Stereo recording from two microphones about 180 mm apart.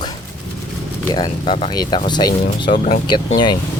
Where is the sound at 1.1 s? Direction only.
25° left (ahead or behind).